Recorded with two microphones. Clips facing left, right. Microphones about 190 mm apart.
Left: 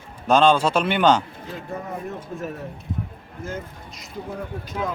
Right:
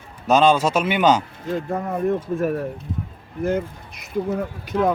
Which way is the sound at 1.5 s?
55° right (ahead or behind).